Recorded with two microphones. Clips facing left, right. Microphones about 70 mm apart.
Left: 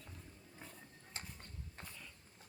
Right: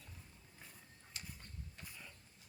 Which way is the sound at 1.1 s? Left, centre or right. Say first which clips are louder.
Left 2 dB; left.